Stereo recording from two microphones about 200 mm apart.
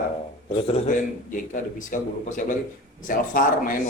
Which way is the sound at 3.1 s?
45° left (ahead or behind).